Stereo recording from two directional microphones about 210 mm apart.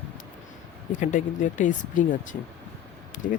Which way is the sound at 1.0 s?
35° left (ahead or behind).